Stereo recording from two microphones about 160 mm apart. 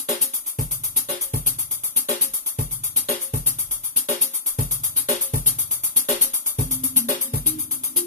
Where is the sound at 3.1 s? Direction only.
55° left (ahead or behind).